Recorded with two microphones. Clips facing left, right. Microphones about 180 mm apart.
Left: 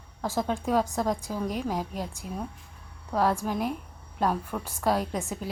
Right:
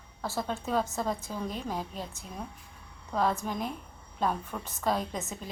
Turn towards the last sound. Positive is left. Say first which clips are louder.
# left 4 dB
turn(degrees=10)  # may be behind; listen again after turning